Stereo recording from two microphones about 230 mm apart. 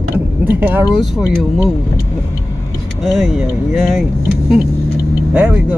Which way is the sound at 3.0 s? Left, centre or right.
Centre.